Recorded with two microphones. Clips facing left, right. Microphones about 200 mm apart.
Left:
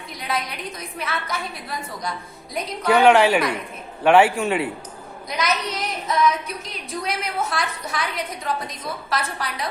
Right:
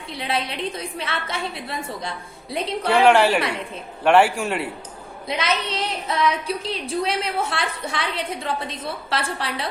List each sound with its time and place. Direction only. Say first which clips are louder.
0.1 s a woman's voice: right 2 dB; 30° right (ahead or behind)
3.1 s a man's voice: left 1 dB; 5° left (ahead or behind)
5.3 s a woman's voice: even; 30° right (ahead or behind)